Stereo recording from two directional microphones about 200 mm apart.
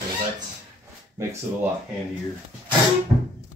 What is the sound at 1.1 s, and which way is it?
Speech, 10° right (ahead or behind).